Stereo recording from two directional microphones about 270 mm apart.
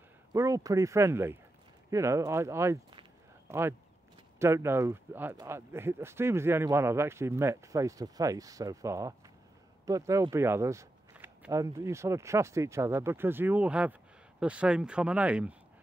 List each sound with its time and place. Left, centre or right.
0.3 s speech: centre